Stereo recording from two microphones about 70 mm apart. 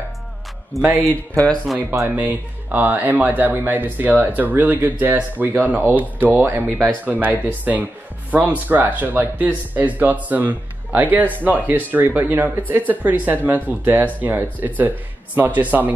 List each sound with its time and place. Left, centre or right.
0.7 s a man's voice: centre
1.3 s speech: centre
2.0 s speech: right